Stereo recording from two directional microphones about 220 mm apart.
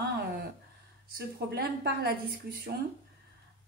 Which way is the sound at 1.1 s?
45° right (ahead or behind).